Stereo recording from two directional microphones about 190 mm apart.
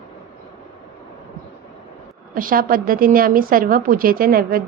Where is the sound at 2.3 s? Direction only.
45° right (ahead or behind).